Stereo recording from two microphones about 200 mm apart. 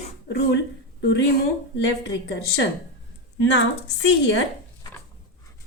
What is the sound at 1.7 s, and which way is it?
Speech, 60° left (ahead or behind).